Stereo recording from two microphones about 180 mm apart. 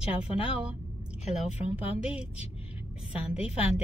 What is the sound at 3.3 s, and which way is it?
Speech, 5° right (ahead or behind).